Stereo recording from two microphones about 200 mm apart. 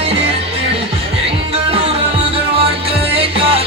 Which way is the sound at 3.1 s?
30° right (ahead or behind).